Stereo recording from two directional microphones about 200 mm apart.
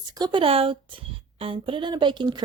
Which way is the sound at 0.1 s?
20° right (ahead or behind).